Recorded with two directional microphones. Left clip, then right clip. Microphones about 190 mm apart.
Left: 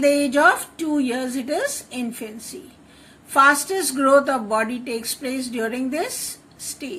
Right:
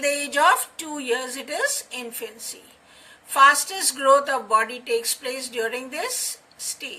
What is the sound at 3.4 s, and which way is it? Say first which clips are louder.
A woman's voice: right 2 dB; 20° left (ahead or behind).